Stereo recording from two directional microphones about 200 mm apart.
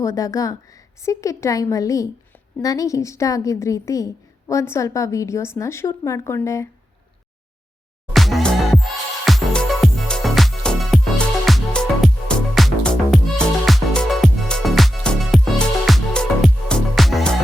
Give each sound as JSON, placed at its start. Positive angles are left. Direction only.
{"t": 0.0, "sound": "a woman's voice", "side_deg": 15}
{"t": 8.1, "sound": "music", "side_deg": 0}